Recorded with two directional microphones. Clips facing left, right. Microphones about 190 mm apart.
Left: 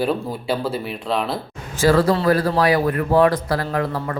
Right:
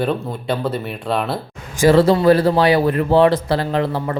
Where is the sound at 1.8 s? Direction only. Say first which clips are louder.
Right 4 dB; 25° right (ahead or behind).